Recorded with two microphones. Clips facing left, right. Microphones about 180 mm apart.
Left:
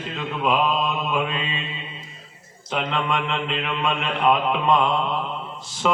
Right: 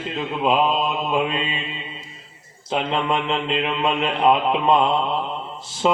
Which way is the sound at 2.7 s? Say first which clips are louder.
Right 3 dB; 30° right (ahead or behind).